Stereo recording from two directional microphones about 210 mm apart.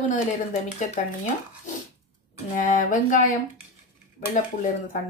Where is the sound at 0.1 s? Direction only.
40° left (ahead or behind).